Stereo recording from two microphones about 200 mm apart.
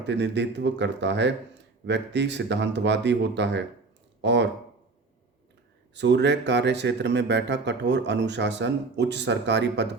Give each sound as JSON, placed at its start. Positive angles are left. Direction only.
{"t": 0.0, "sound": "speech", "side_deg": -60}
{"t": 5.9, "sound": "speech", "side_deg": -60}